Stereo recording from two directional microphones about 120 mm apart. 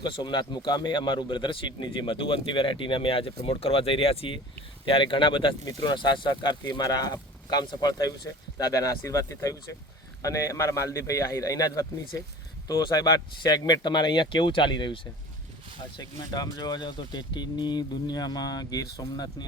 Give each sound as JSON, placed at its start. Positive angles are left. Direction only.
{"t": 0.0, "sound": "a man's voice", "side_deg": 40}